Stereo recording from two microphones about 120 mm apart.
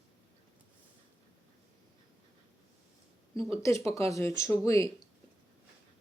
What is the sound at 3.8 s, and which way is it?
Speech, 25° left (ahead or behind).